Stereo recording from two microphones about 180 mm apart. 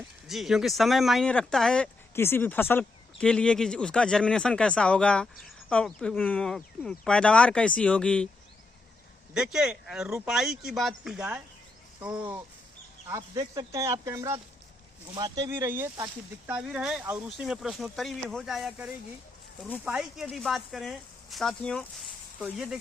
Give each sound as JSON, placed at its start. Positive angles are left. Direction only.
{"t": 0.3, "sound": "speech", "side_deg": 0}
{"t": 9.3, "sound": "speech", "side_deg": -5}
{"t": 13.1, "sound": "speech", "side_deg": -20}